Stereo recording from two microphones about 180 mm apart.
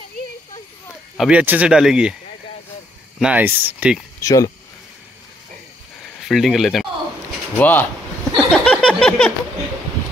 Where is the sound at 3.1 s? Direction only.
5° right (ahead or behind).